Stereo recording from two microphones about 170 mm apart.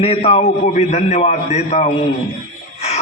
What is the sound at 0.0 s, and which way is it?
A man's voice, 35° left (ahead or behind).